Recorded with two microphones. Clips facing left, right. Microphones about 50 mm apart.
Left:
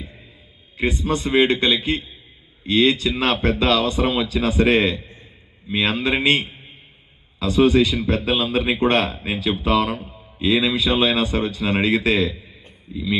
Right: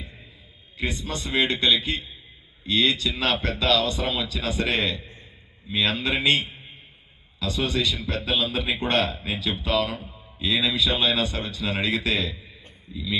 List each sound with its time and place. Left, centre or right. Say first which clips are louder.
0.8 s a man's voice: left 8 dB; left